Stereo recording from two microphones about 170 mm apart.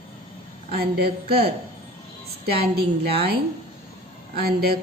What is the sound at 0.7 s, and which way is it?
A woman's voice, 65° right (ahead or behind).